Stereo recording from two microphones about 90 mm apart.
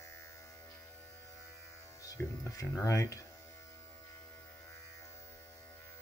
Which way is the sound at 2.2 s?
15° left (ahead or behind).